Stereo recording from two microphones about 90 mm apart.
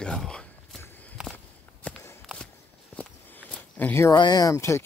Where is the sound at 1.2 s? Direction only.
10° right (ahead or behind).